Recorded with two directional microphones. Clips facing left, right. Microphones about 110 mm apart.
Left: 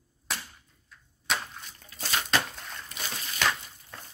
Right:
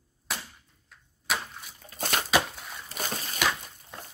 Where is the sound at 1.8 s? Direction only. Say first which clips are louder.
Right 2 dB; 50° right (ahead or behind).